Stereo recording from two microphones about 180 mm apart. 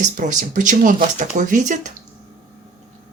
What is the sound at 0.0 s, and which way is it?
Speech, 45° right (ahead or behind).